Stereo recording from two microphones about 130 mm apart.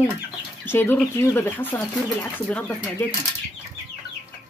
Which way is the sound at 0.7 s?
15° left (ahead or behind).